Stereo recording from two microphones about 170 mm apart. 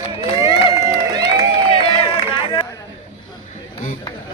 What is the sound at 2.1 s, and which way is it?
Run, 30° left (ahead or behind).